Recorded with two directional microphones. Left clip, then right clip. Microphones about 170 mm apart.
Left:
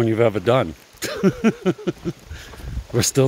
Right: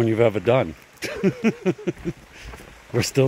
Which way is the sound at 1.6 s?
20° left (ahead or behind).